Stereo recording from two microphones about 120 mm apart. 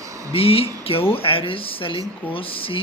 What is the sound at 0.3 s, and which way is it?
Speech, 55° left (ahead or behind).